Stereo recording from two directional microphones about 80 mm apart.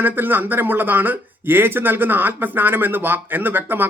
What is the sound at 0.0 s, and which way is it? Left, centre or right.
Speech, right.